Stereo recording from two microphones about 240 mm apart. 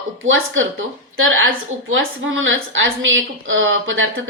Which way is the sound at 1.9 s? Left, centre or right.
Right.